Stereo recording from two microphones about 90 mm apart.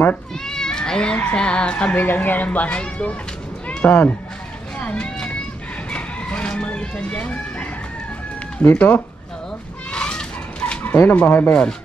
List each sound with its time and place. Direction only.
0.5 s speech: 5° left (ahead or behind)
3.6 s run: 15° left (ahead or behind)
4.7 s vehicle: 15° left (ahead or behind)
5.9 s chicken: 15° left (ahead or behind)
8.6 s speech: 15° left (ahead or behind)
9.8 s fowl: 10° left (ahead or behind)
11.1 s speech: 20° left (ahead or behind)